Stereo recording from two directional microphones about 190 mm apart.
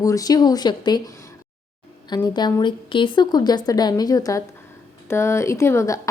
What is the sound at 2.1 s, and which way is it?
A woman's voice, 20° left (ahead or behind).